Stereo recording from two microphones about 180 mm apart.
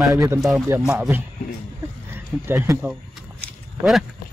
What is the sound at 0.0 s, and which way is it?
Speech, 15° right (ahead or behind).